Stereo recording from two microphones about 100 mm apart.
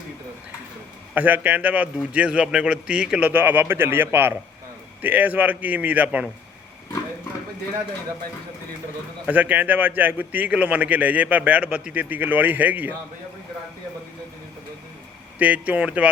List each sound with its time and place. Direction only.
1.1 s a man's voice: 15° right (ahead or behind)
9.2 s a man's voice: 15° right (ahead or behind)
15.4 s a man's voice: 15° right (ahead or behind)